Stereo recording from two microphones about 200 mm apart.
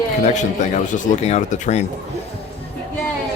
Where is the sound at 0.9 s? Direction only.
35° left (ahead or behind).